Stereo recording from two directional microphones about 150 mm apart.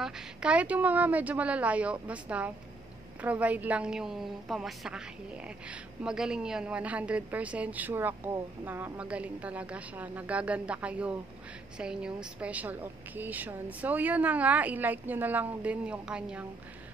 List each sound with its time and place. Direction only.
0.0 s a woman's voice: 5° right (ahead or behind)